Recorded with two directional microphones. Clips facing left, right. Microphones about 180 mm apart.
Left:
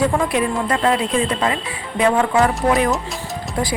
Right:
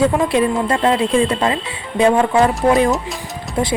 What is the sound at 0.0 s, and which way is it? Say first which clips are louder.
Speech: right 3 dB; 30° right (ahead or behind).